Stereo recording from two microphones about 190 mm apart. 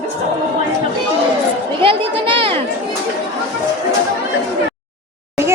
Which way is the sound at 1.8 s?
25° right (ahead or behind).